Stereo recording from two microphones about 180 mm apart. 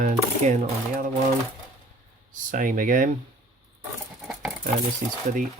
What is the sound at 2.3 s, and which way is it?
Speech, 45° right (ahead or behind).